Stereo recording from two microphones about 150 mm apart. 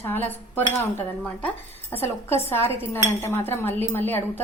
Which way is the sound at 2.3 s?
15° left (ahead or behind).